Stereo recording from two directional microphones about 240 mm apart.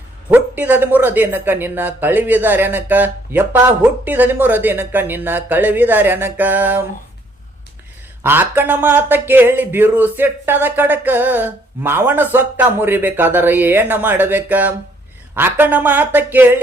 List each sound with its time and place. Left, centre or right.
0.3 s speech: centre
8.2 s speech: centre